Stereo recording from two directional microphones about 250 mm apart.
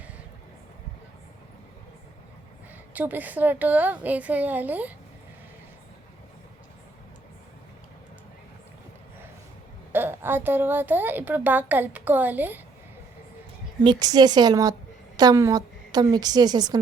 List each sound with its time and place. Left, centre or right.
2.9 s a woman's voice: centre
9.9 s a woman's voice: centre
13.8 s a woman's voice: centre